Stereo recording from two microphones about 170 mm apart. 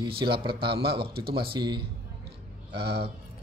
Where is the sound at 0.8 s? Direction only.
70° right (ahead or behind).